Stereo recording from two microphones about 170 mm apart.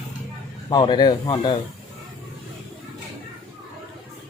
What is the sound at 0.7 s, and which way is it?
Speech, 25° left (ahead or behind).